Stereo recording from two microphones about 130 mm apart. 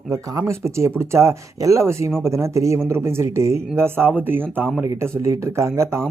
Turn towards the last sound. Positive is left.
turn(degrees=-20)  # may be behind; listen again after turning